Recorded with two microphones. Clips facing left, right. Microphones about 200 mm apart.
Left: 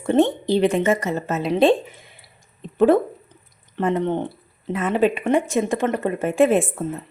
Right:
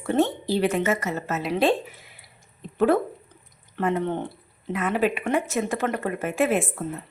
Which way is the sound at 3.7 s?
25° left (ahead or behind).